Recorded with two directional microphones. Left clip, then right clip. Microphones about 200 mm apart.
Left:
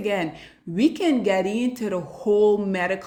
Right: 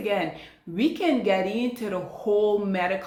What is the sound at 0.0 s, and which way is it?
Speech, 40° left (ahead or behind).